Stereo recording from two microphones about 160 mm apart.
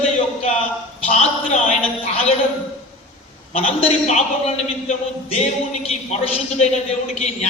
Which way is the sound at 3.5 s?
40° left (ahead or behind).